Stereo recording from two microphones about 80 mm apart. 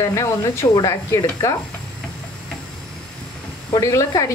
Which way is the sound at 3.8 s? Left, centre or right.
Left.